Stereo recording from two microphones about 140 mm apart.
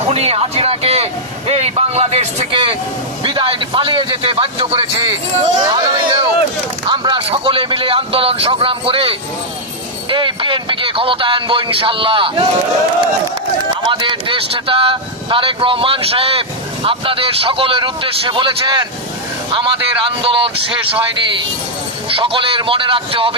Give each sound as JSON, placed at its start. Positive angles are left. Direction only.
{"t": 0.1, "sound": "a man's voice", "side_deg": -45}
{"t": 13.8, "sound": "speech", "side_deg": -35}
{"t": 22.1, "sound": "speech", "side_deg": -40}